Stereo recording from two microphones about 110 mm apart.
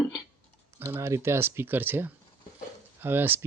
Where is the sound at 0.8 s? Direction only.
25° right (ahead or behind).